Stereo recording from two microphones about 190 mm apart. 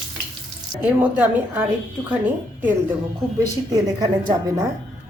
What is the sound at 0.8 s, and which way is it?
A woman's voice, 10° right (ahead or behind).